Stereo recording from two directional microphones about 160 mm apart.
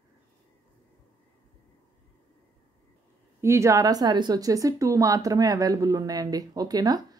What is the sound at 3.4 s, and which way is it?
Speech, 20° right (ahead or behind).